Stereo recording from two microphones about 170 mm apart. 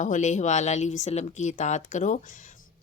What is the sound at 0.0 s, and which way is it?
A woman's voice, 45° left (ahead or behind).